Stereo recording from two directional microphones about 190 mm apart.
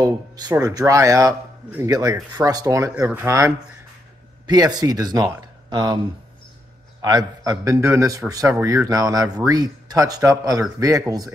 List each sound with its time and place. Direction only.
0.0 s speech: 20° right (ahead or behind)
7.0 s speech: 20° right (ahead or behind)